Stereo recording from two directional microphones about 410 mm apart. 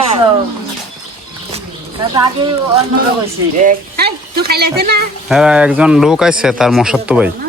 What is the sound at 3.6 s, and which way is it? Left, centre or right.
Speech, right.